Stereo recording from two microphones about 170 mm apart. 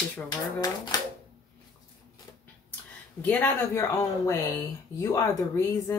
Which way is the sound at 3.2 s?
10° left (ahead or behind).